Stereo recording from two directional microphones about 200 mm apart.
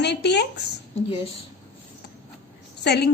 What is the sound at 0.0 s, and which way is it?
Speech, 55° left (ahead or behind).